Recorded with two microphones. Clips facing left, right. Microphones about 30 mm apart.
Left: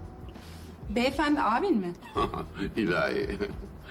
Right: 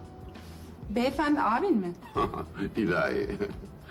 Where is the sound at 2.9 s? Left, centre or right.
Left.